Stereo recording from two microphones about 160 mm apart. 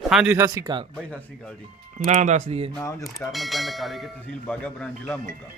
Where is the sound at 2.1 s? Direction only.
45° right (ahead or behind).